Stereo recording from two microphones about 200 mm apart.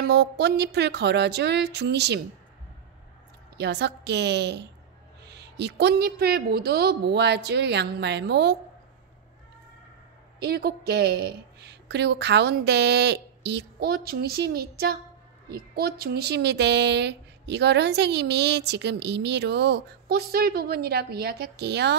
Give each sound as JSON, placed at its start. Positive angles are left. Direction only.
{"t": 0.0, "sound": "speech", "side_deg": -55}
{"t": 3.5, "sound": "speech", "side_deg": -55}
{"t": 10.4, "sound": "a woman's voice", "side_deg": -50}